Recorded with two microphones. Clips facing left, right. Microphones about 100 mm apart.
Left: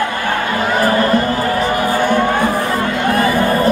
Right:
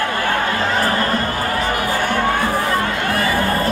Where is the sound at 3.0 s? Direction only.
20° left (ahead or behind).